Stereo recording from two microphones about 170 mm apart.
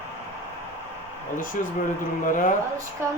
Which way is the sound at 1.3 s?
55° left (ahead or behind).